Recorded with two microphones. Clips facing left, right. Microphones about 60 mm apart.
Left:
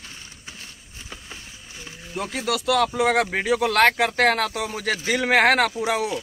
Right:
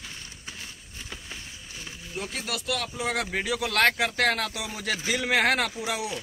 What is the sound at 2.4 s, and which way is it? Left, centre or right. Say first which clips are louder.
Speech: left 13 dB; left.